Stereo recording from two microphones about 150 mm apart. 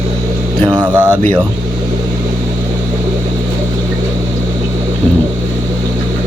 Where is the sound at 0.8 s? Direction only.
10° right (ahead or behind).